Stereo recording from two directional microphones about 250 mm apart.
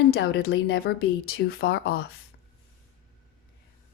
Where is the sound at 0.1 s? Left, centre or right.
Left.